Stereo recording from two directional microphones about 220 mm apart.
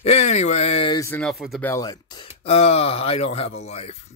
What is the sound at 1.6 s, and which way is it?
Speech, 15° left (ahead or behind).